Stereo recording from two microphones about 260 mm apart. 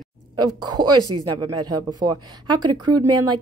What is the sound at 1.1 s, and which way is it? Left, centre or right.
Speech, right.